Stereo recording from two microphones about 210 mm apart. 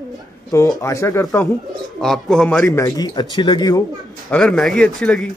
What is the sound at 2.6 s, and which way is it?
Speech, 15° left (ahead or behind).